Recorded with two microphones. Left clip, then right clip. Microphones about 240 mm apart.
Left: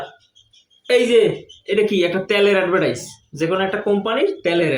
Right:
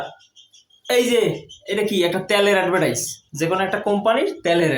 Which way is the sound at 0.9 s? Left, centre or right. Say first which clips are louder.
Left 3 dB; centre.